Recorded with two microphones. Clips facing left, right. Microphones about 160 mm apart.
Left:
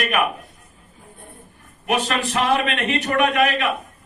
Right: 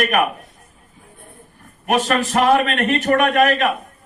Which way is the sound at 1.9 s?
45° right (ahead or behind).